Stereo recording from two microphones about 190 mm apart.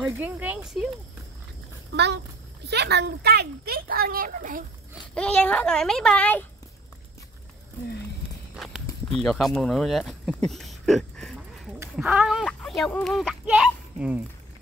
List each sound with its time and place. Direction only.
0.0 s speech: 10° right (ahead or behind)
2.6 s speech: 60° right (ahead or behind); by 4.6 s 45° right (ahead or behind)
5.1 s speech: 5° left (ahead or behind)
8.5 s speech: centre (ahead or behind)
10.9 s a sound: centre (ahead or behind)
12.0 s speech: 5° right (ahead or behind)